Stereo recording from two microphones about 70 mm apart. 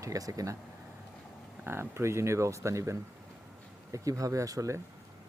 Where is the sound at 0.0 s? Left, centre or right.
Right.